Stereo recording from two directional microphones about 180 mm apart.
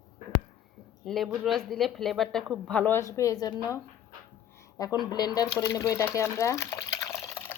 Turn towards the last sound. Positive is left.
turn(degrees=15)  # may be behind; listen again after turning